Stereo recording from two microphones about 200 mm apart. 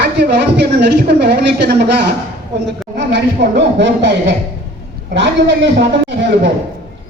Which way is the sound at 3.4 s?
60° right (ahead or behind).